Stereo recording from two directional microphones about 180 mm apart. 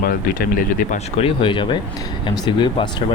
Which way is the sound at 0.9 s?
35° left (ahead or behind).